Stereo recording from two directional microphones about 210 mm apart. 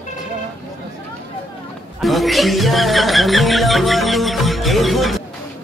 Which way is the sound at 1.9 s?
Centre (ahead or behind).